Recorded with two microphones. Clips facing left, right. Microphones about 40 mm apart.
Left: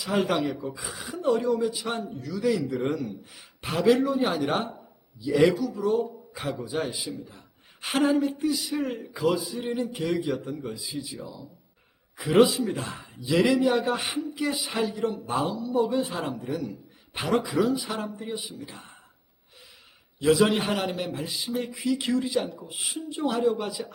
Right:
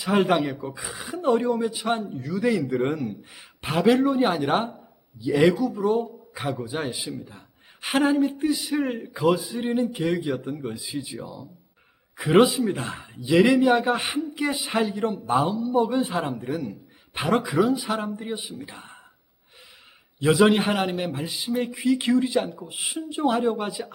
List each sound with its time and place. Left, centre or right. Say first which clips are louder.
0.0 s a man's voice: right 4 dB; right
0.7 s speech: right 2 dB; centre
1.3 s a man's voice: right 2 dB; right
15.3 s speech: right 7 dB; centre
15.6 s a man's voice: right 3 dB; right
20.2 s a man's voice: right 3 dB; right